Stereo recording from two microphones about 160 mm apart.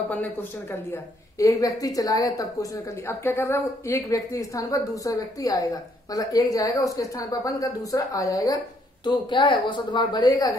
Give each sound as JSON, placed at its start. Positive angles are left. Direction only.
{"t": 0.1, "sound": "a woman's voice", "side_deg": 10}